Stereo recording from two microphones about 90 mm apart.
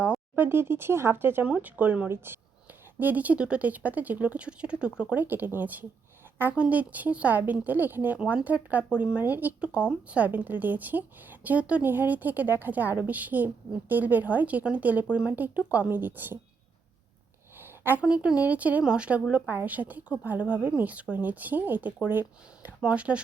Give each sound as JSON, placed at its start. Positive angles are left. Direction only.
{"t": 0.3, "sound": "speech", "side_deg": -25}
{"t": 17.6, "sound": "a sound", "side_deg": -25}
{"t": 18.0, "sound": "speech", "side_deg": -10}